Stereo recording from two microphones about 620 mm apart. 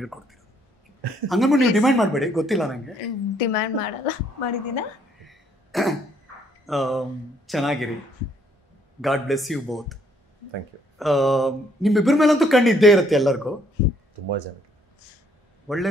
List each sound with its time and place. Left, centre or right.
0.0 s a sound: centre
1.2 s speech: centre
3.3 s a woman's voice: left
5.2 s throat clearing: centre
6.6 s speech: centre
9.0 s speech: centre
11.0 s speech: centre
15.6 s a man's voice: centre